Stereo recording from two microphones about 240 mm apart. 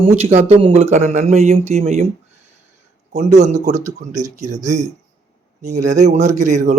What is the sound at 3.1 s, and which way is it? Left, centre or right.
Speech, right.